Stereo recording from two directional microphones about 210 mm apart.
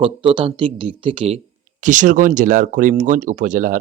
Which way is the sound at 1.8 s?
40° right (ahead or behind).